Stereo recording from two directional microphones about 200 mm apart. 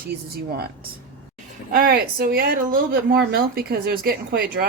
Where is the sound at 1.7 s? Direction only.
50° right (ahead or behind).